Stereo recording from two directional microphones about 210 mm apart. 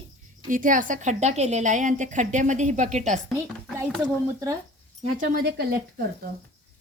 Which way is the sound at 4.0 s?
15° right (ahead or behind).